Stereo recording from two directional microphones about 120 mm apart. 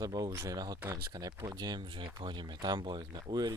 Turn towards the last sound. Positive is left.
turn(degrees=-35)  # may be behind; listen again after turning